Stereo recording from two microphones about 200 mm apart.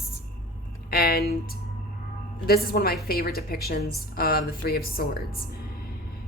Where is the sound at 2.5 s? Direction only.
50° left (ahead or behind).